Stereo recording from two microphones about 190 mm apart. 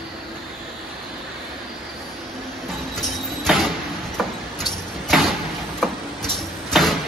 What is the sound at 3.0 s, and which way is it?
Vehicle, centre (ahead or behind).